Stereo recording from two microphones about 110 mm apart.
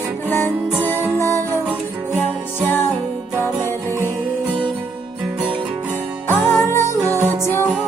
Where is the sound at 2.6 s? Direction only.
20° left (ahead or behind).